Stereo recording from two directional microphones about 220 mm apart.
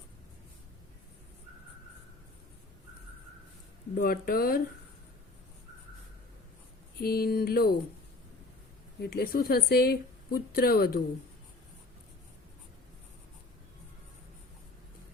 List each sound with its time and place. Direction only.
4.0 s speech: 40° left (ahead or behind)
7.0 s a woman's voice: 45° left (ahead or behind)
9.0 s a woman's voice: 45° left (ahead or behind)